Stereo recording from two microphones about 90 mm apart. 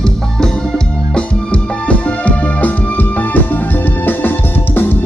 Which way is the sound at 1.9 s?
15° left (ahead or behind).